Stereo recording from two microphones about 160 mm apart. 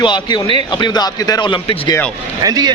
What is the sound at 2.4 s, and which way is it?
Speech, 25° right (ahead or behind).